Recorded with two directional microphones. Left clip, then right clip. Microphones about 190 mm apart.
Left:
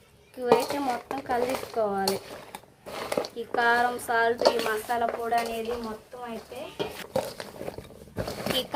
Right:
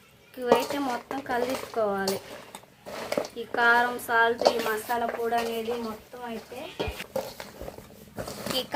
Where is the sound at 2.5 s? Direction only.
15° left (ahead or behind).